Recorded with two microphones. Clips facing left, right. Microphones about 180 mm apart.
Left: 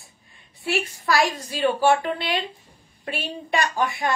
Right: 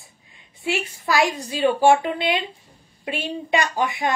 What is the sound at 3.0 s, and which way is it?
A woman's voice, 20° right (ahead or behind).